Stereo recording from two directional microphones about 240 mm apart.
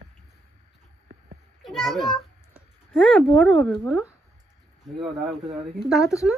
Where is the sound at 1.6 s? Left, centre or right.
Centre.